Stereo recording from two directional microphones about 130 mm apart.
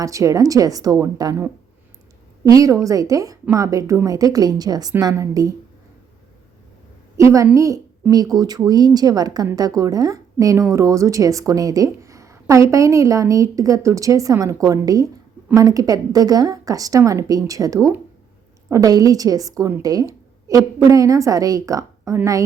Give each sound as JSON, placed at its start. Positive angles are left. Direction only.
{"t": 0.0, "sound": "speech", "side_deg": -25}
{"t": 7.2, "sound": "a woman's voice", "side_deg": -25}